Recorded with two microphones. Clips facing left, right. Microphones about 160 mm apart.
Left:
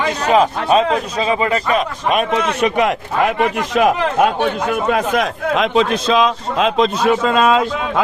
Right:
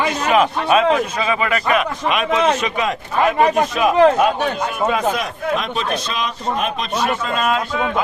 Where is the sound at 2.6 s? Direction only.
65° left (ahead or behind).